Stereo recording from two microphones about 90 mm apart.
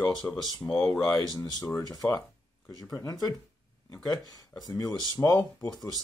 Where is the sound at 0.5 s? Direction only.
40° left (ahead or behind).